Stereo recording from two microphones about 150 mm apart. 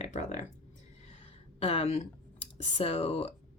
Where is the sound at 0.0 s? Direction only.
50° left (ahead or behind).